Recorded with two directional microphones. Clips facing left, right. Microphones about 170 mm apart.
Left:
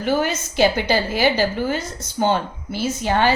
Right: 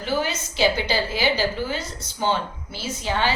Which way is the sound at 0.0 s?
50° left (ahead or behind).